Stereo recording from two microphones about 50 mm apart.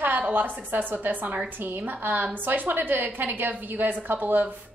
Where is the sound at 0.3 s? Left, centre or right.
Right.